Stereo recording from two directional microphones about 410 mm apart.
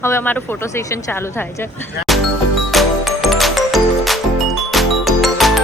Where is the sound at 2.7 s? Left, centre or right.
Centre.